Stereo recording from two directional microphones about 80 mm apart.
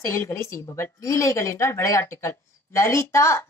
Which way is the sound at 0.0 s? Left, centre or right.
Left.